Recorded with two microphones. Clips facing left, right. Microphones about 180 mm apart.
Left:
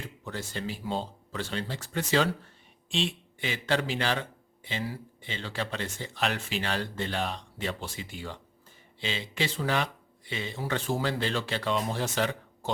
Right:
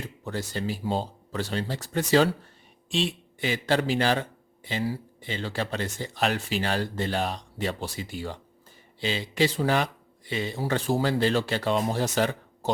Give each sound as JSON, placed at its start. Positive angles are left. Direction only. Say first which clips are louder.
{"t": 0.3, "sound": "a man's voice", "louder": "right 5 dB", "side_deg": -40}